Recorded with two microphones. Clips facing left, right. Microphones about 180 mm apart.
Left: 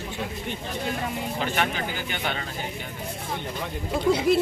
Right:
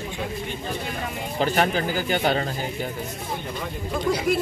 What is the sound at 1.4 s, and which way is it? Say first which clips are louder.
Speech: right 7 dB; 40° right (ahead or behind).